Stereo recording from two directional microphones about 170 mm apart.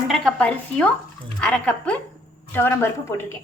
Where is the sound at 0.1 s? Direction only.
5° left (ahead or behind).